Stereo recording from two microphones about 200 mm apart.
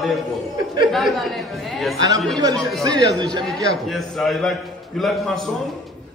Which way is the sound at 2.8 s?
20° right (ahead or behind).